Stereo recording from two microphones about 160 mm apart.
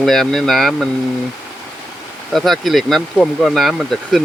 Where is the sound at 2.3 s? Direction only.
Centre (ahead or behind).